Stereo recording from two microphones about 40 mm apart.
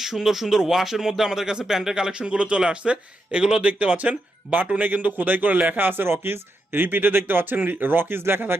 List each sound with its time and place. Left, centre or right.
0.0 s speech: centre
2.2 s speech: right
3.6 s speech: right
4.8 s speech: right
6.8 s speech: right